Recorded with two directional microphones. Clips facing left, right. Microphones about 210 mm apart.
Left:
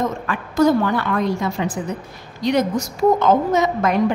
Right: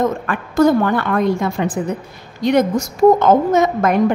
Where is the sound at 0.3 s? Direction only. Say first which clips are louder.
Right 1 dB; 55° right (ahead or behind).